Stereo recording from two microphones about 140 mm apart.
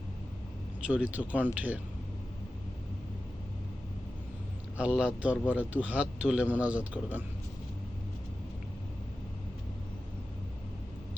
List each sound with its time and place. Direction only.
0.9 s a man's voice: 10° right (ahead or behind)
4.8 s a man's voice: 10° right (ahead or behind)